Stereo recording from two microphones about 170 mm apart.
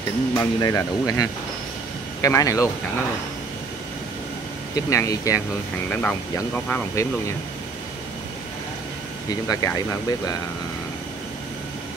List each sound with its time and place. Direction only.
0.3 s speech: 20° left (ahead or behind)
4.7 s speech: 20° left (ahead or behind)
5.9 s speech: 10° left (ahead or behind)
9.3 s speech: 20° left (ahead or behind)